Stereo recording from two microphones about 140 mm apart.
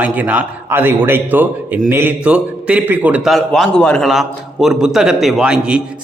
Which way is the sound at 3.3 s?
Centre (ahead or behind).